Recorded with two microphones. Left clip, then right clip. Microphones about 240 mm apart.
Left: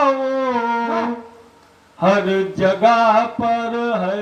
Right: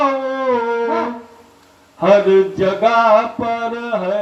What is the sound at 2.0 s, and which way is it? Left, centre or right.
Mantra, centre.